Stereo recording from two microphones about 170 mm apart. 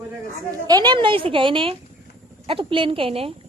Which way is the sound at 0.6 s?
25° right (ahead or behind).